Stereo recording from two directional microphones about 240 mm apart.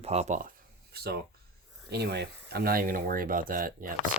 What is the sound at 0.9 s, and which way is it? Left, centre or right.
Speech, right.